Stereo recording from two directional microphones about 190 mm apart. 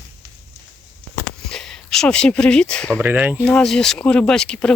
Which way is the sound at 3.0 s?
10° right (ahead or behind).